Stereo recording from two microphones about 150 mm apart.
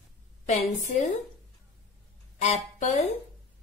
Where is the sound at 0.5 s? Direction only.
50° left (ahead or behind).